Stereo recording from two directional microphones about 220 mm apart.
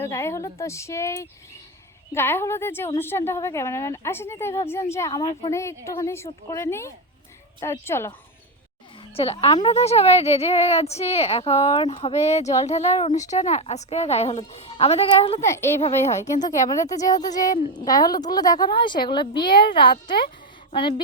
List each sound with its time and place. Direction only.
0.0 s speech: 10° left (ahead or behind)
9.1 s a woman's voice: 25° left (ahead or behind)
15.4 s a woman's voice: 10° left (ahead or behind)